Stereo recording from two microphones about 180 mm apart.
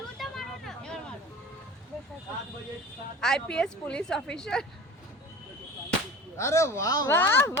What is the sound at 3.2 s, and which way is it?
A woman's voice, 5° left (ahead or behind).